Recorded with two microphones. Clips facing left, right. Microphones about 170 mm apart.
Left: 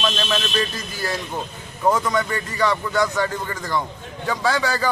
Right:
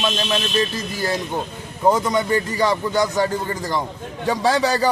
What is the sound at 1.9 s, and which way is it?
A man's voice, 25° right (ahead or behind).